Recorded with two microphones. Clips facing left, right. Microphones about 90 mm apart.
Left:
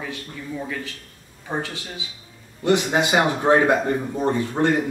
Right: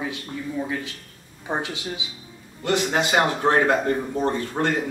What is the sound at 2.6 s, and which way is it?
A man's voice, 20° left (ahead or behind).